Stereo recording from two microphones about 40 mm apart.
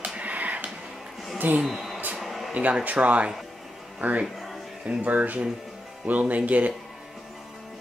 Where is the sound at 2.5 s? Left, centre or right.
Right.